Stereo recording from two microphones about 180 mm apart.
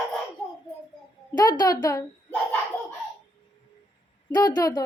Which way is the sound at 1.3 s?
20° left (ahead or behind).